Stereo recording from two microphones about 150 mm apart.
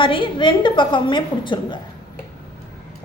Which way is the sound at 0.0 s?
35° left (ahead or behind).